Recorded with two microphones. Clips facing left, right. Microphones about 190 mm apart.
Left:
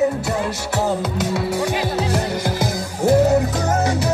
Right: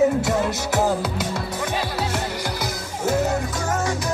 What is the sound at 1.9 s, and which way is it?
Music, 35° left (ahead or behind).